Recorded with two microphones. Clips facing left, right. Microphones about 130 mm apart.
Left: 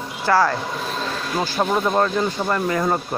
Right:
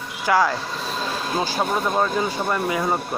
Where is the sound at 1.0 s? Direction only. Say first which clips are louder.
Even; 10° right (ahead or behind).